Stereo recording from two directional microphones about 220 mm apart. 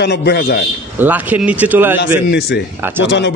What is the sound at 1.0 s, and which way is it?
Speech, 5° right (ahead or behind).